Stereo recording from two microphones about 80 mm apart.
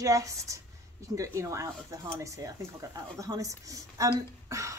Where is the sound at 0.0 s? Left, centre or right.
Right.